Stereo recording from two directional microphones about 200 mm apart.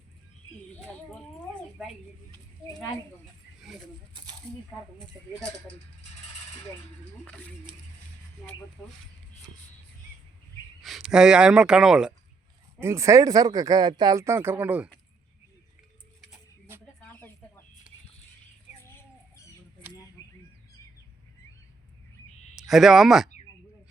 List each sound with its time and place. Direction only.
3.7 s speech: centre (ahead or behind)
4.1 s a sound: 20° right (ahead or behind)
7.3 s speech: 5° left (ahead or behind)
10.8 s speech: 5° right (ahead or behind)
12.8 s speech: 15° right (ahead or behind)
17.0 s a sound: 10° left (ahead or behind)
22.5 s speech: centre (ahead or behind)